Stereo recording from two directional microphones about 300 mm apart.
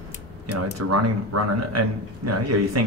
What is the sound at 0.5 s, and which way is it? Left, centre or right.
A man's voice, right.